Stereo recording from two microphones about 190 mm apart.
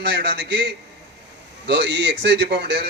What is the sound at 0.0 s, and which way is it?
Speech, 65° right (ahead or behind).